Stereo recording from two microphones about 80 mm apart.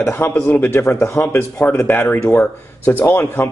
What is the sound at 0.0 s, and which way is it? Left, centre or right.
Speech, left.